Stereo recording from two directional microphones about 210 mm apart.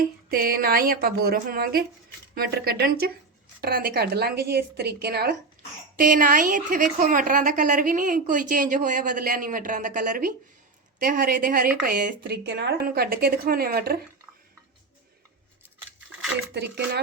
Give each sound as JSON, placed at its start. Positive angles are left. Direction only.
{"t": 0.0, "sound": "a woman's voice", "side_deg": -45}
{"t": 16.6, "sound": "speech", "side_deg": -55}